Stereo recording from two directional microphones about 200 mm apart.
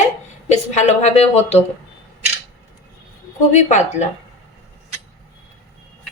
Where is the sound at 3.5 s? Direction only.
35° left (ahead or behind).